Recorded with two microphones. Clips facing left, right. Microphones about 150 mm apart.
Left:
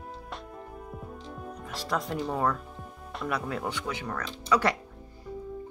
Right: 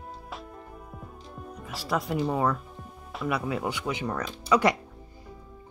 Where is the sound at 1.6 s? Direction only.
5° right (ahead or behind).